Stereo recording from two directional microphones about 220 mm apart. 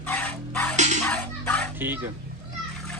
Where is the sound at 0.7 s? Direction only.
35° right (ahead or behind).